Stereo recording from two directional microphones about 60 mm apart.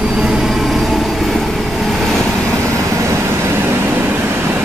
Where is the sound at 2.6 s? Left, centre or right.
Right.